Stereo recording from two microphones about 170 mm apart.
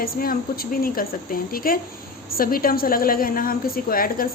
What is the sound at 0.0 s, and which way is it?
A woman's voice, 60° left (ahead or behind).